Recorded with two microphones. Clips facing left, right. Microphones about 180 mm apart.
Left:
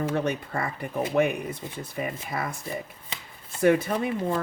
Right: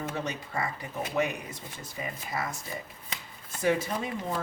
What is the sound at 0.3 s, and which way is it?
Speech, 55° left (ahead or behind).